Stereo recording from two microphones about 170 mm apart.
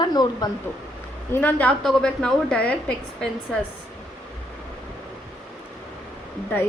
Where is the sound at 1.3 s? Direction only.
10° left (ahead or behind).